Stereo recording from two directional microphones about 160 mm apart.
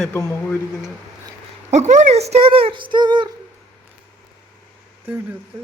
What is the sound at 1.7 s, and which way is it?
Speech, 45° right (ahead or behind).